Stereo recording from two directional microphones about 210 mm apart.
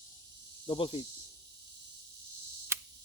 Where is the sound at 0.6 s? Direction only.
25° left (ahead or behind).